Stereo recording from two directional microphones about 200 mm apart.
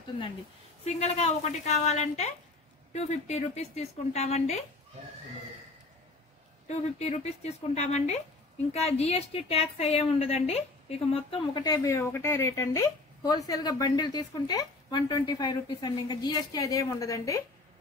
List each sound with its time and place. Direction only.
0.8 s speech: 35° left (ahead or behind)
6.7 s a woman's voice: 30° left (ahead or behind); by 17.4 s 15° left (ahead or behind)